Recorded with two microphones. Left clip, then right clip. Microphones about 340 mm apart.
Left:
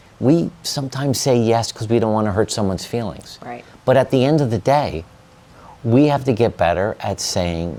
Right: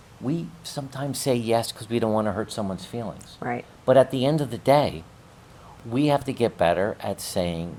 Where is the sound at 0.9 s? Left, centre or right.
Left.